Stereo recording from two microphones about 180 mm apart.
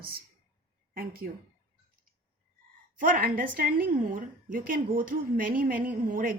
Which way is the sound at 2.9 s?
50° right (ahead or behind).